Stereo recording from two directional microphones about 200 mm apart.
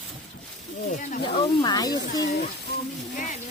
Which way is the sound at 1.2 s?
25° left (ahead or behind).